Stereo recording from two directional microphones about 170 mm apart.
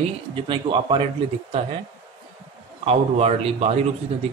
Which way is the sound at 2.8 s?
35° right (ahead or behind).